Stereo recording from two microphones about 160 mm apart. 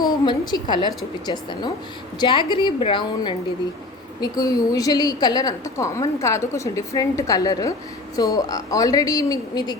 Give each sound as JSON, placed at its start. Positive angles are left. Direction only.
{"t": 0.3, "sound": "a woman's voice", "side_deg": 30}